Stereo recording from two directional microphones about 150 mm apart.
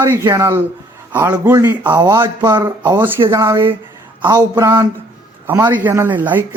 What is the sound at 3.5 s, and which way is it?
Speech, 35° right (ahead or behind).